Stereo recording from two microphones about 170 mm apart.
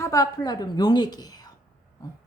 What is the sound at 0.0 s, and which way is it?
A woman's voice, 20° left (ahead or behind).